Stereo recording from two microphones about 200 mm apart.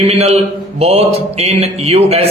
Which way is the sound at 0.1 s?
30° right (ahead or behind).